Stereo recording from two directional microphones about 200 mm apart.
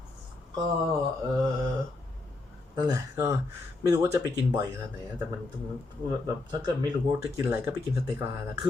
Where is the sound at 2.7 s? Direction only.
15° right (ahead or behind).